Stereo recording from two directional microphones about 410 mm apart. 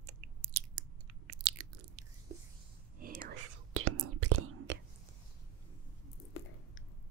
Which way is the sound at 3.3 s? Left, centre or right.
Right.